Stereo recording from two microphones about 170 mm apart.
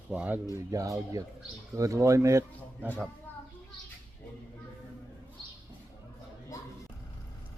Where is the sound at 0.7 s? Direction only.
20° right (ahead or behind).